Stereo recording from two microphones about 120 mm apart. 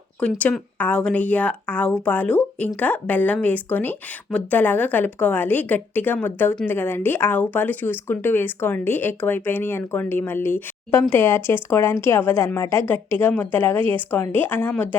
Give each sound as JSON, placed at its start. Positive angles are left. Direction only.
{"t": 0.2, "sound": "a woman's voice", "side_deg": 10}